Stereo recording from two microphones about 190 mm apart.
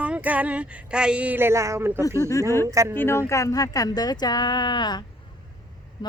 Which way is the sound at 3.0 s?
15° left (ahead or behind).